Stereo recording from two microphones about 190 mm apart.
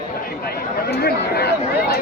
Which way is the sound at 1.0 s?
55° left (ahead or behind).